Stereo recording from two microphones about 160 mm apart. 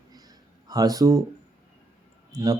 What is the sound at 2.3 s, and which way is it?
Speech, 20° right (ahead or behind).